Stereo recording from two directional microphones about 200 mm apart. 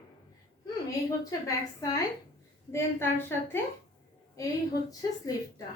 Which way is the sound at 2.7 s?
15° left (ahead or behind).